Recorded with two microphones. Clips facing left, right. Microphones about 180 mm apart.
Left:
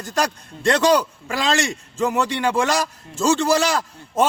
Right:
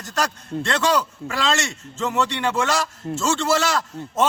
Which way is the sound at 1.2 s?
60° right (ahead or behind).